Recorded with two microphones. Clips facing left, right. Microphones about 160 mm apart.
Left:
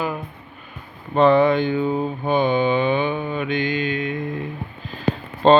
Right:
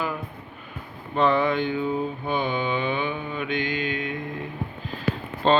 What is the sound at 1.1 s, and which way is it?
Speech, 65° left (ahead or behind).